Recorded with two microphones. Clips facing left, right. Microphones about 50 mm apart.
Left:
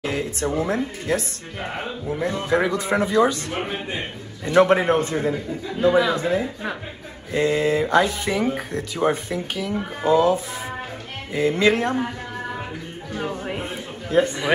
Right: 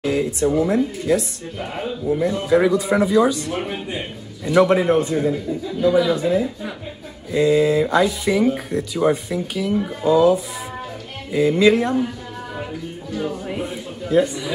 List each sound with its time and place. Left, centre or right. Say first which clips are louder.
0.0 s a man's voice: right 5 dB; left
13.1 s a man's voice: right 2 dB; left